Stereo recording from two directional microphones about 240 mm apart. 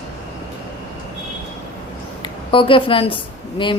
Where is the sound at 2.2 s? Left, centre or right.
Left.